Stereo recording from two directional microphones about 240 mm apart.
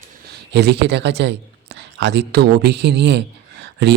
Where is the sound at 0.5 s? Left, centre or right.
Right.